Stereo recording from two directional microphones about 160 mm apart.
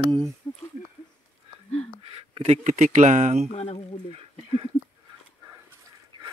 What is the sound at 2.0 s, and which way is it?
Speech, 35° right (ahead or behind).